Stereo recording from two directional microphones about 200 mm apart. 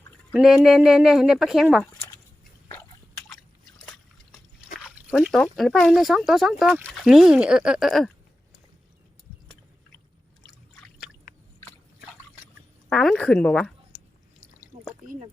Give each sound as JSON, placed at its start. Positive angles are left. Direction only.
{"t": 0.3, "sound": "speech", "side_deg": -5}
{"t": 1.9, "sound": "a sound", "side_deg": 20}
{"t": 4.8, "sound": "speech", "side_deg": -5}
{"t": 12.9, "sound": "speech", "side_deg": 5}
{"t": 15.0, "sound": "speech", "side_deg": -40}